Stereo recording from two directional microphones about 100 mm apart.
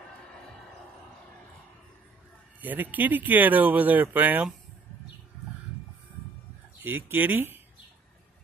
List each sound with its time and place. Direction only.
2.6 s speech: 15° right (ahead or behind)
6.8 s speech: 20° right (ahead or behind)